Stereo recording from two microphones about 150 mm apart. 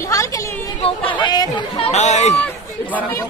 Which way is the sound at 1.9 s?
50° left (ahead or behind).